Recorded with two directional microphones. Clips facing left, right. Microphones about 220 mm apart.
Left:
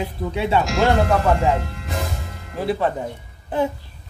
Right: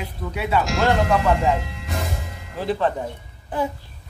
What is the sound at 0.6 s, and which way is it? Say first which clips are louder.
Speech: left 2 dB; centre (ahead or behind).